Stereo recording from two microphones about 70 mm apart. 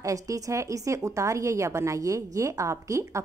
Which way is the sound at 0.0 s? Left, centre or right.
Right.